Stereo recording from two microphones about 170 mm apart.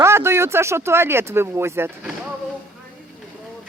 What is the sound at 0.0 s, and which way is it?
Speech, 15° right (ahead or behind).